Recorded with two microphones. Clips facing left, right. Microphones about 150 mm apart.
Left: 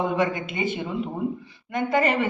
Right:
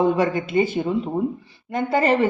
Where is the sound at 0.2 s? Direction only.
35° right (ahead or behind).